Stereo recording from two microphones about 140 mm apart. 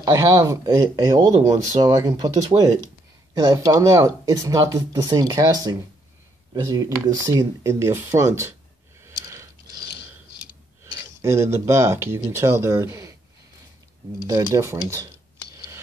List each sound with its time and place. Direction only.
0.0 s speech: 30° right (ahead or behind)
9.0 s a sound: 25° right (ahead or behind)
10.9 s speech: 20° right (ahead or behind)
14.5 s speech: 20° right (ahead or behind)